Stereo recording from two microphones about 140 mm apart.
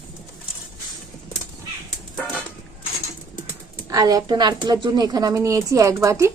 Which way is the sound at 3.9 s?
25° right (ahead or behind).